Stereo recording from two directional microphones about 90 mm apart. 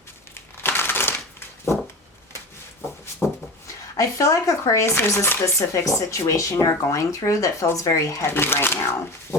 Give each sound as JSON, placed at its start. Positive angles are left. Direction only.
{"t": 0.6, "sound": "crushing", "side_deg": 25}
{"t": 3.2, "sound": "a sound", "side_deg": 20}
{"t": 3.9, "sound": "speech", "side_deg": 40}